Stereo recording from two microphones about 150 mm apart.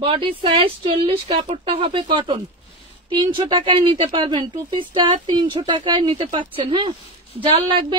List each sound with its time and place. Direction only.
0.0 s a woman's voice: 35° right (ahead or behind)